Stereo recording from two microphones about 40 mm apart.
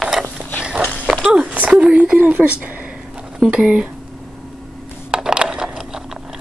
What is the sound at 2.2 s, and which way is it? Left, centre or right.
Speech, right.